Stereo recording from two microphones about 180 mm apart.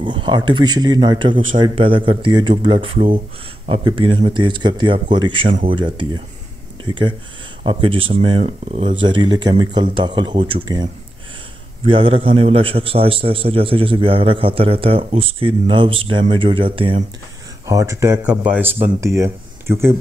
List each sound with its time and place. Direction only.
0.0 s a man's voice: 25° right (ahead or behind)
11.9 s a man's voice: 30° right (ahead or behind)
17.6 s speech: 15° right (ahead or behind)